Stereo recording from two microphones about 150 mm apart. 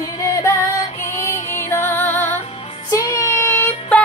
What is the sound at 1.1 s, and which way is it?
Music, 15° left (ahead or behind).